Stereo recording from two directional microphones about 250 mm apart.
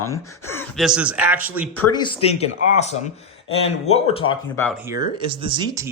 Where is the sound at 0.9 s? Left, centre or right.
Centre.